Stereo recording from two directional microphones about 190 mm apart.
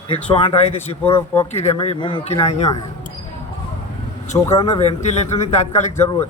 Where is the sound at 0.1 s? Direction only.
30° left (ahead or behind).